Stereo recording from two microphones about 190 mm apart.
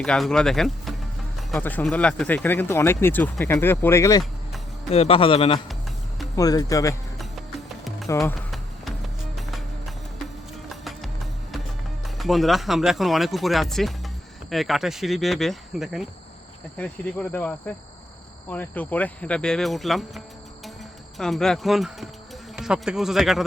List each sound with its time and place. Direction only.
0.0 s speech: 5° left (ahead or behind)
4.9 s speech: 30° left (ahead or behind)
6.3 s speech: 20° left (ahead or behind)
8.2 s music: centre (ahead or behind)
12.0 s speech: centre (ahead or behind)